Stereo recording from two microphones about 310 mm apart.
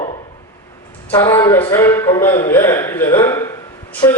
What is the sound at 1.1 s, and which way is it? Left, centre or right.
A man's voice, centre.